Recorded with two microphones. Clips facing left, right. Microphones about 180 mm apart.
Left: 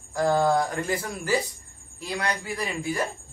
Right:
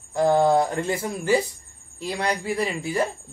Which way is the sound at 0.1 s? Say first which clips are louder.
Right 3 dB; 25° right (ahead or behind).